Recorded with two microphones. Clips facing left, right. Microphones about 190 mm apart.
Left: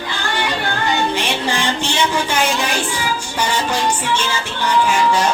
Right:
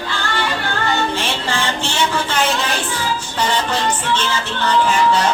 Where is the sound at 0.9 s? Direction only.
15° left (ahead or behind).